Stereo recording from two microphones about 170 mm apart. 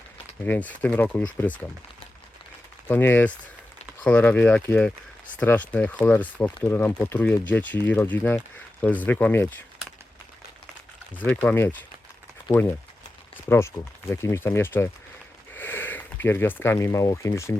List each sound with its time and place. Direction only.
0.4 s speech: 10° left (ahead or behind)
2.8 s speech: 10° left (ahead or behind)
11.1 s speech: 10° left (ahead or behind)